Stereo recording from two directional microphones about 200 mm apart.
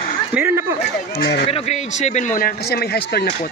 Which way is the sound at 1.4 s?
30° left (ahead or behind).